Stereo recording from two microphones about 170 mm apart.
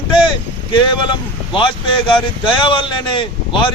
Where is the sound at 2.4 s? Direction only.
30° left (ahead or behind).